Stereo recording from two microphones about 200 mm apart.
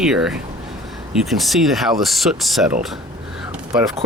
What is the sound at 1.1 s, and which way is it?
Speech, centre (ahead or behind).